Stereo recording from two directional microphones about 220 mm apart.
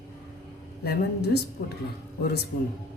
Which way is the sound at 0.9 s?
50° left (ahead or behind).